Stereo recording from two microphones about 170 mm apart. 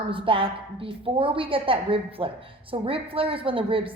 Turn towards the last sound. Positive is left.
turn(degrees=-30)  # may be behind; listen again after turning